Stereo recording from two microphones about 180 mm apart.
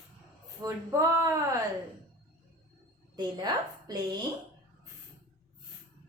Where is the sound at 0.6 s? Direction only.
20° right (ahead or behind).